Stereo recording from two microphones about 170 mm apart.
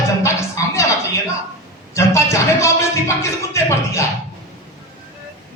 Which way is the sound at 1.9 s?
15° left (ahead or behind).